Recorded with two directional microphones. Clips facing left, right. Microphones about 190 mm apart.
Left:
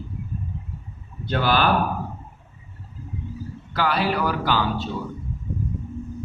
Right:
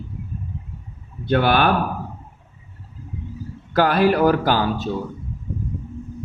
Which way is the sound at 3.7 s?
50° right (ahead or behind).